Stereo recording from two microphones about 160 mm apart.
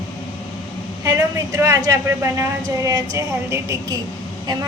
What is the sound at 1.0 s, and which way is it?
Speech, 20° right (ahead or behind).